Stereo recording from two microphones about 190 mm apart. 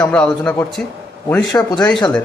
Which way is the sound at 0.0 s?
5° left (ahead or behind).